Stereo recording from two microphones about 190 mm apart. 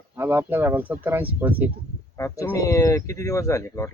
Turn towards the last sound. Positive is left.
turn(degrees=15)  # may be behind; listen again after turning